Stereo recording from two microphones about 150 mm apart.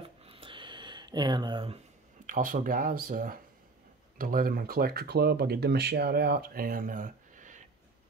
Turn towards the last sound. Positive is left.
turn(degrees=-60)  # may be behind; listen again after turning